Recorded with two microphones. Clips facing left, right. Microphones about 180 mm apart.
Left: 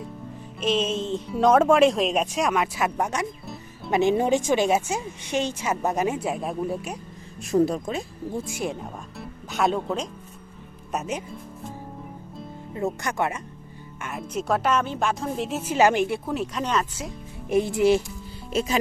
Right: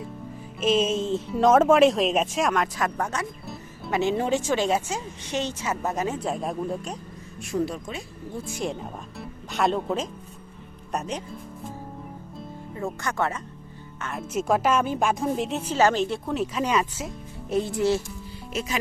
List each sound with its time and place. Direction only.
0.6 s a woman's voice: 5° right (ahead or behind)
7.5 s speech: 40° left (ahead or behind)
8.4 s speech: 5° left (ahead or behind)
12.7 s a woman's voice: 20° left (ahead or behind)
14.0 s speech: centre (ahead or behind)
15.4 s speech: 5° left (ahead or behind)
15.7 s a woman's voice: 15° left (ahead or behind)
16.3 s speech: centre (ahead or behind)
17.5 s a woman's voice: 10° left (ahead or behind)